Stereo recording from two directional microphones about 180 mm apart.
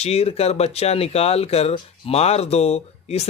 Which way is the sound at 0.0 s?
35° left (ahead or behind).